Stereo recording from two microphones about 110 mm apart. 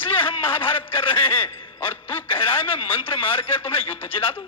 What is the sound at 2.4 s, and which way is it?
Speech, 20° left (ahead or behind).